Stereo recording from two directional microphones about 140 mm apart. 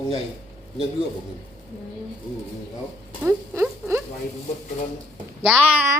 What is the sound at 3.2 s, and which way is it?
Speech, 20° right (ahead or behind).